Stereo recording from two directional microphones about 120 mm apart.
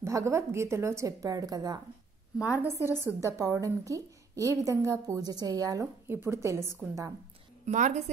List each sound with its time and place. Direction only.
0.0 s speech: 25° right (ahead or behind)
2.3 s a woman's voice: 10° right (ahead or behind)
2.7 s speech: 20° right (ahead or behind)
7.6 s a woman's voice: 80° right